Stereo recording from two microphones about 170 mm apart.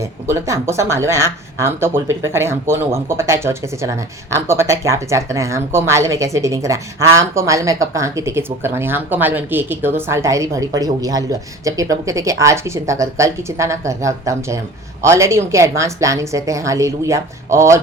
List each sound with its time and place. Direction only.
0.0 s speech: 15° right (ahead or behind)